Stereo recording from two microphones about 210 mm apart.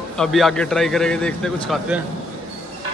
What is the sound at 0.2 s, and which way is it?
A man's voice, centre (ahead or behind).